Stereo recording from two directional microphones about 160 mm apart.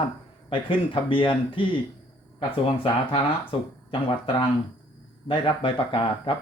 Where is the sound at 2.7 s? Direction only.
35° left (ahead or behind).